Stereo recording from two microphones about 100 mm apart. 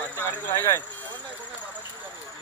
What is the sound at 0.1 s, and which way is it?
Speech, 20° left (ahead or behind).